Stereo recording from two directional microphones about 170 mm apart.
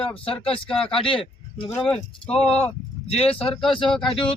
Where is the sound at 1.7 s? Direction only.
5° left (ahead or behind).